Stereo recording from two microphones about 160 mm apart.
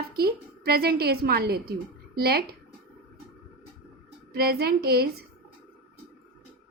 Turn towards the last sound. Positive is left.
turn(degrees=-75)  # may be behind; listen again after turning